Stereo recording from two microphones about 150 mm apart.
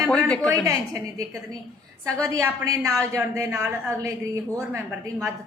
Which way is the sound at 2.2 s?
25° right (ahead or behind).